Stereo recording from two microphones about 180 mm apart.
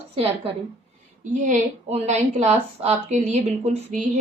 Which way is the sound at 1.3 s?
40° right (ahead or behind).